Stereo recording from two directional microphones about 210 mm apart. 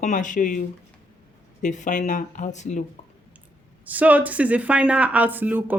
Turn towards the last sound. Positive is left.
turn(degrees=-10)  # may be behind; listen again after turning